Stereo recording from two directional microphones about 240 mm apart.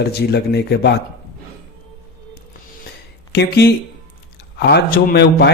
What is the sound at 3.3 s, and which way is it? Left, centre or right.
A man's voice, left.